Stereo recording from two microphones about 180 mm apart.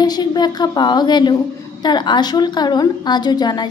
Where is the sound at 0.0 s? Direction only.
20° left (ahead or behind).